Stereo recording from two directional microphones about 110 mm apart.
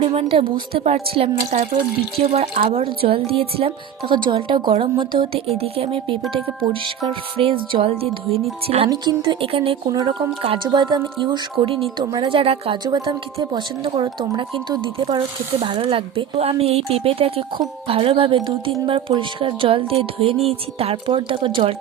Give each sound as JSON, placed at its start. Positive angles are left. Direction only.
{"t": 0.1, "sound": "speech", "side_deg": -60}
{"t": 5.5, "sound": "speech", "side_deg": -65}
{"t": 8.9, "sound": "speech", "side_deg": -45}
{"t": 11.2, "sound": "speech", "side_deg": -55}
{"t": 12.1, "sound": "speech", "side_deg": -45}
{"t": 12.8, "sound": "speech", "side_deg": -45}